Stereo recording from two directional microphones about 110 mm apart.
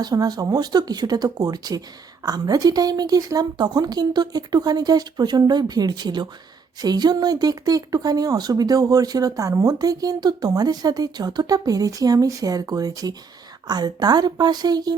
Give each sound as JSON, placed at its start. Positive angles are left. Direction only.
{"t": 0.0, "sound": "speech", "side_deg": -35}